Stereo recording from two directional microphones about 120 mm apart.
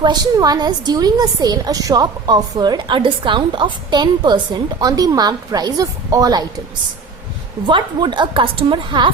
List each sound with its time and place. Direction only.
0.0 s a woman's voice: 35° right (ahead or behind)
7.7 s a woman's voice: 40° right (ahead or behind)